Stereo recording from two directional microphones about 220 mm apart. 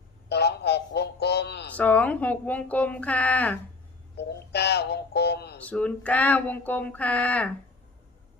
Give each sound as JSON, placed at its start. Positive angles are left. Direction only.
{"t": 0.3, "sound": "a sound", "side_deg": 50}
{"t": 1.7, "sound": "speech", "side_deg": 5}
{"t": 4.2, "sound": "synthetic singing", "side_deg": 50}
{"t": 5.5, "sound": "speech", "side_deg": 5}